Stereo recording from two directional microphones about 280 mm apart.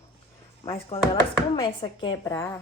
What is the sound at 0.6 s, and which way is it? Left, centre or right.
Speech, centre.